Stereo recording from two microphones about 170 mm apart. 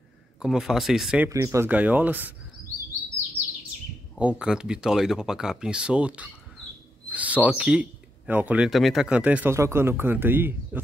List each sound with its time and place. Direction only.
0.4 s speech: centre (ahead or behind)
1.3 s speech: 15° right (ahead or behind)
4.2 s speech: 5° right (ahead or behind)